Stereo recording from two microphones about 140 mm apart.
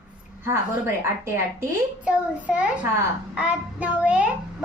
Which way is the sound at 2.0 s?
10° right (ahead or behind).